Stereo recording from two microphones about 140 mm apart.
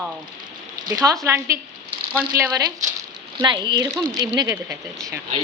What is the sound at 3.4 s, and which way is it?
Speech, 35° right (ahead or behind).